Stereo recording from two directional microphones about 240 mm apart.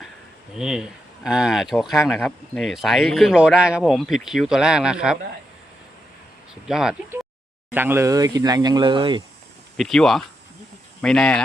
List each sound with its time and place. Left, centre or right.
0.5 s speech: centre
6.5 s speech: centre; by 9.2 s right
9.7 s speech: centre